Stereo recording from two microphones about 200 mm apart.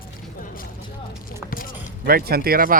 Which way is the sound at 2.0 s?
50° right (ahead or behind).